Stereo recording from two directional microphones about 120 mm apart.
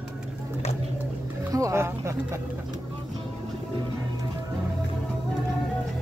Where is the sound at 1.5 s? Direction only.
25° right (ahead or behind).